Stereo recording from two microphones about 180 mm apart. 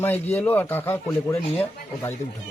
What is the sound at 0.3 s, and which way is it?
A man's voice, 10° left (ahead or behind).